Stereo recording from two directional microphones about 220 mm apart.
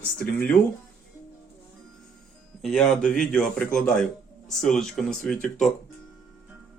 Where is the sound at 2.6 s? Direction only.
Centre (ahead or behind).